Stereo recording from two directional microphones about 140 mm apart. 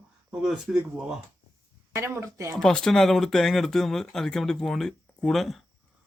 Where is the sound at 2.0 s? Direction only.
20° right (ahead or behind).